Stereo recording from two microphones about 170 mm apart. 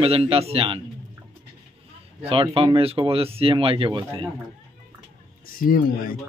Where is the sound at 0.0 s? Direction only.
35° right (ahead or behind).